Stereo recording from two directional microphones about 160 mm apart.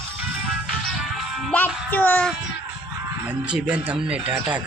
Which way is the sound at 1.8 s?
10° left (ahead or behind).